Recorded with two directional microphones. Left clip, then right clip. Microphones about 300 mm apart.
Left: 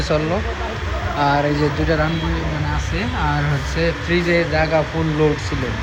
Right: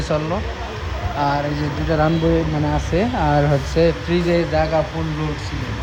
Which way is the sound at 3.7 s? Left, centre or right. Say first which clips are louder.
Even; centre.